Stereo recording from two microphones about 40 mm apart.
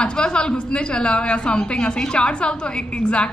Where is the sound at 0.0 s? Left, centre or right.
Left.